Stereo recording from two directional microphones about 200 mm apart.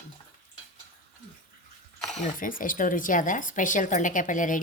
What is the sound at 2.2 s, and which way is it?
A woman's voice, 40° left (ahead or behind).